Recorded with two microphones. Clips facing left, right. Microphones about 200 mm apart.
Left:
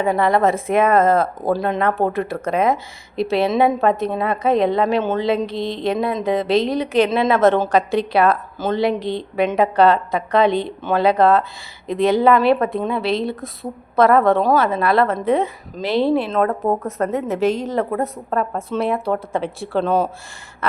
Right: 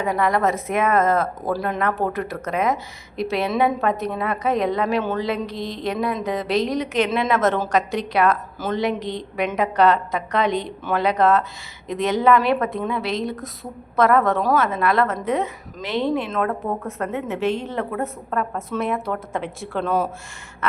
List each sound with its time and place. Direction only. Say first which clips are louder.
0.0 s a woman's voice: left 4 dB; 30° left (ahead or behind)